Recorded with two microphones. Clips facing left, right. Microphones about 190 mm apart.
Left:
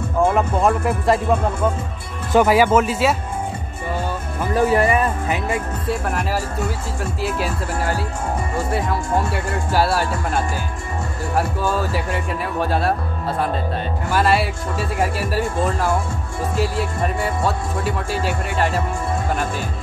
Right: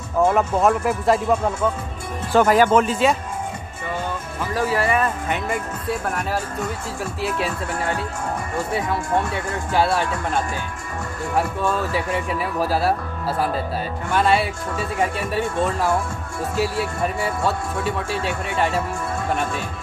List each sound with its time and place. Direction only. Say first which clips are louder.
0.3 s speech: even; centre (ahead or behind)
2.3 s speech: left 1 dB; 10° left (ahead or behind)
4.6 s speech: left 5 dB; 20° left (ahead or behind)
5.9 s speech: left 1 dB; centre (ahead or behind)
14.1 s speech: even; centre (ahead or behind)